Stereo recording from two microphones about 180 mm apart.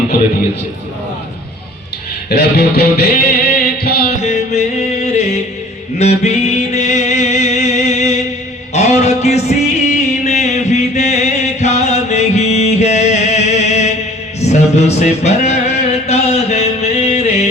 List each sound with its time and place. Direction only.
2.3 s music: 60° left (ahead or behind)
4.2 s music: 40° left (ahead or behind)